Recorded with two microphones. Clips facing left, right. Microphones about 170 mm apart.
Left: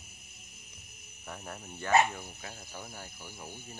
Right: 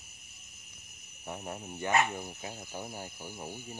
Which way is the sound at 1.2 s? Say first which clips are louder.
Right 4 dB; 20° right (ahead or behind).